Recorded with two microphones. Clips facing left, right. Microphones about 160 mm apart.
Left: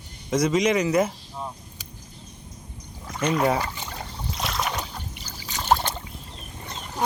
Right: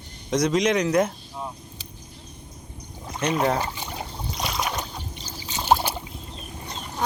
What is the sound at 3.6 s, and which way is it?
Trickle, 15° right (ahead or behind).